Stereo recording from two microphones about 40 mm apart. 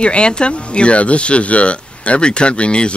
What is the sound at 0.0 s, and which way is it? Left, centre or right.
Speech, left.